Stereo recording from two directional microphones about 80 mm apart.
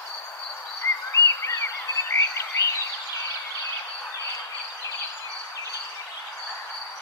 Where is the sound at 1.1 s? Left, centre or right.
Left.